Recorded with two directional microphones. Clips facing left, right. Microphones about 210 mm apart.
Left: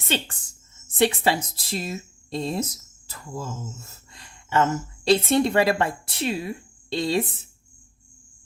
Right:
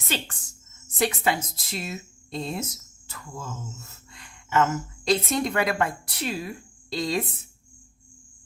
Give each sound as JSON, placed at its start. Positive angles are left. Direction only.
{"t": 0.1, "sound": "a woman's voice", "side_deg": 30}